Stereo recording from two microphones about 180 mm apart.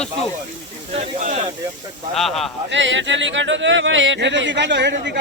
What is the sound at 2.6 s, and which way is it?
Speech, 90° right.